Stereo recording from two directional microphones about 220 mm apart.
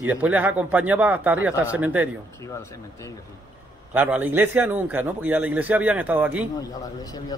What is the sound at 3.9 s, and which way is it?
A man's voice, 10° right (ahead or behind).